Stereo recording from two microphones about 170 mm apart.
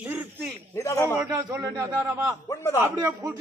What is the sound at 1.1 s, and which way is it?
Speech, 15° right (ahead or behind).